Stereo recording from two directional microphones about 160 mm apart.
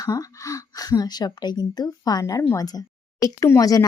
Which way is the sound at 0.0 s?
20° left (ahead or behind).